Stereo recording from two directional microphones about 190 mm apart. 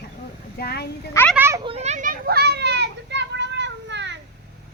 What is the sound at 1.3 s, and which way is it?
Speech, 10° right (ahead or behind).